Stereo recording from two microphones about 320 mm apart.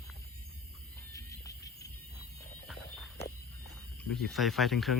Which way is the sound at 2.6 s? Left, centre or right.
Centre.